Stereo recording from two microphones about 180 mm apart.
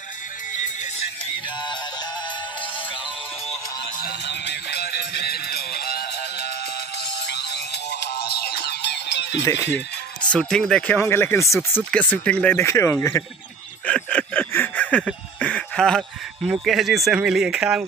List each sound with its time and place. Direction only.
4.0 s music: 65° left (ahead or behind)
7.2 s music: 70° left (ahead or behind)
9.4 s speech: 15° left (ahead or behind)
10.3 s speech: 5° left (ahead or behind)
13.8 s a sound: 5° left (ahead or behind)
16.6 s speech: centre (ahead or behind)